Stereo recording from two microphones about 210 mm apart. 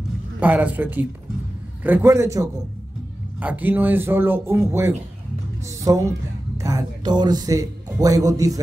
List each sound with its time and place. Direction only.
0.4 s speech: 10° right (ahead or behind)